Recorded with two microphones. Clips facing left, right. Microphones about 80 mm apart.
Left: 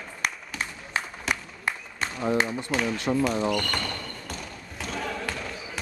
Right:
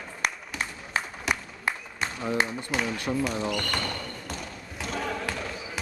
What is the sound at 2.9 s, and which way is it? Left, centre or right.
Speech, left.